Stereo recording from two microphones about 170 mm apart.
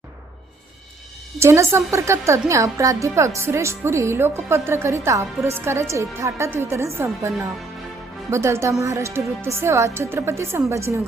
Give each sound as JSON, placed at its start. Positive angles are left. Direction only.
{"t": 1.4, "sound": "speech", "side_deg": -15}